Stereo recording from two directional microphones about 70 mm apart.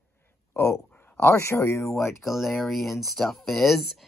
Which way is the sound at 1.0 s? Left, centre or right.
Left.